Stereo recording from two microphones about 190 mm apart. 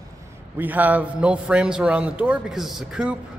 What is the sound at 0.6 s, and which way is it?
A man's voice, 10° right (ahead or behind).